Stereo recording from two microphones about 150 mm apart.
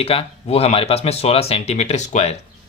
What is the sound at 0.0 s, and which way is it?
Speech, 40° left (ahead or behind).